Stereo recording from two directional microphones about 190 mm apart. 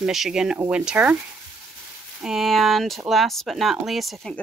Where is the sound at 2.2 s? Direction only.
Centre (ahead or behind).